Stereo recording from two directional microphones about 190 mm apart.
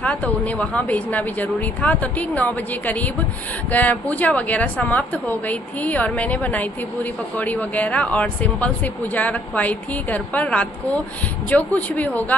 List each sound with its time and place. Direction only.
0.0 s a woman's voice: 5° left (ahead or behind)